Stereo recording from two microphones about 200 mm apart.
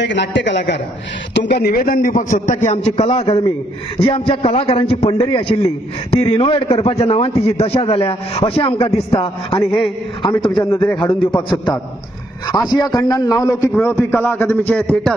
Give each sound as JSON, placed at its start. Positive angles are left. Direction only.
{"t": 0.0, "sound": "a man's voice", "side_deg": 60}